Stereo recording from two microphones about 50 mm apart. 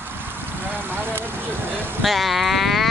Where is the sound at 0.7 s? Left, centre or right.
Right.